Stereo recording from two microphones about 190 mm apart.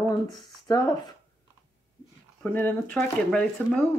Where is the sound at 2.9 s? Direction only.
5° left (ahead or behind).